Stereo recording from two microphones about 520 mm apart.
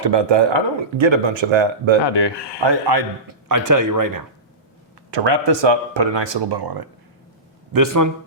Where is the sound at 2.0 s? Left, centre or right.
Left.